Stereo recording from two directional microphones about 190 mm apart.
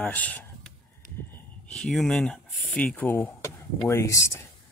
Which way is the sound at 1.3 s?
5° left (ahead or behind).